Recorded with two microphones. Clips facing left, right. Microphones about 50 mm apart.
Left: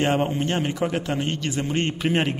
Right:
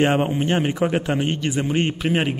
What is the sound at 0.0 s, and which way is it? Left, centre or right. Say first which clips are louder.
A man's voice: right 3 dB; centre.